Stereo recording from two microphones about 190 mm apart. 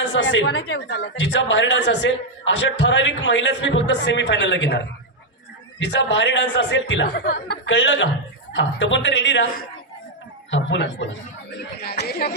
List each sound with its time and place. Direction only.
0.0 s a woman's voice: 70° left (ahead or behind)
5.8 s a woman's voice: 65° left (ahead or behind)
10.5 s a woman's voice: 70° left (ahead or behind)
11.8 s speech: 55° left (ahead or behind)